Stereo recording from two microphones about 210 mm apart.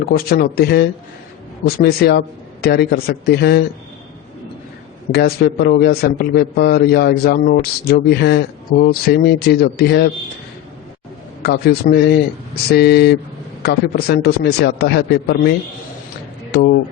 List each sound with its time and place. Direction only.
0.0 s speech: 45° left (ahead or behind)
5.1 s speech: 50° left (ahead or behind)
11.4 s speech: 45° left (ahead or behind)